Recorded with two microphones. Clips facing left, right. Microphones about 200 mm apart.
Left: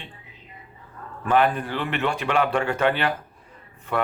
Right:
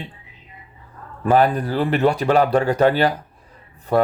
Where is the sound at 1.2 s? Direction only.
35° right (ahead or behind).